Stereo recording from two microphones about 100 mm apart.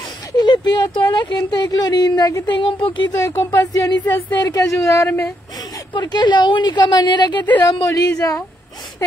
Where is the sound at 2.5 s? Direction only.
60° left (ahead or behind).